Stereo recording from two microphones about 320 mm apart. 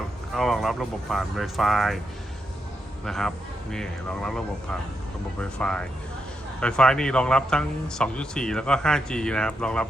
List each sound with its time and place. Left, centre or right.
0.3 s speech: centre
3.0 s speech: centre